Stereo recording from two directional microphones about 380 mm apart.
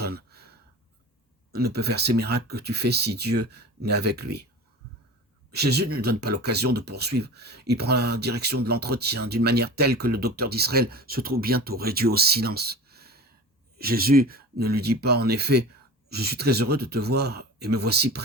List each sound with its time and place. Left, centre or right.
0.0 s a sound: right
1.5 s speech: right
5.5 s speech: right